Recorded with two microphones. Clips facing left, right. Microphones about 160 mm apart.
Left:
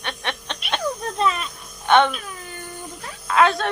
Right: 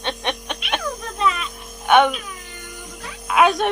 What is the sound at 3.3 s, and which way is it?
Speech, 10° right (ahead or behind).